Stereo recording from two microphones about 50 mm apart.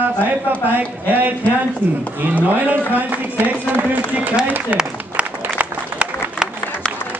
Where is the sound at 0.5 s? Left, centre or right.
Right.